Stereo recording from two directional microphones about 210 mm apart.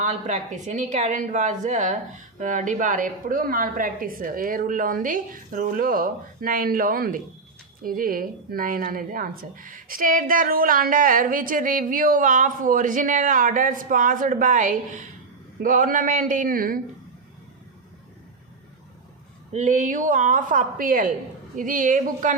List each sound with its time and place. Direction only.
0.0 s a woman's voice: 35° right (ahead or behind)
19.5 s a woman's voice: 35° right (ahead or behind)